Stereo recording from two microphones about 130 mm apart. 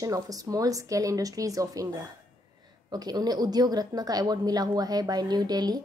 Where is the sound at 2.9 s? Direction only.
30° right (ahead or behind).